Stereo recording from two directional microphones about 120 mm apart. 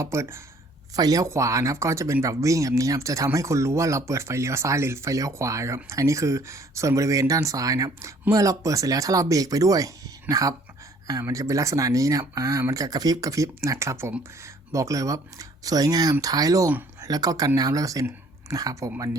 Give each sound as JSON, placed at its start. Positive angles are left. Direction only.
{"t": 0.0, "sound": "speech", "side_deg": -25}